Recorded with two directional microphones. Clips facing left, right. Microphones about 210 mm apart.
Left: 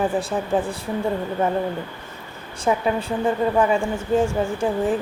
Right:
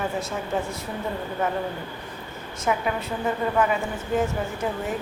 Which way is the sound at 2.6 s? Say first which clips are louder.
Left 4 dB; 30° left (ahead or behind).